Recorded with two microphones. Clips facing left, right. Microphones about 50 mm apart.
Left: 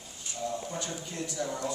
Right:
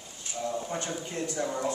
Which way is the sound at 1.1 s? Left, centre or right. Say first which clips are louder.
Right 3 dB; right.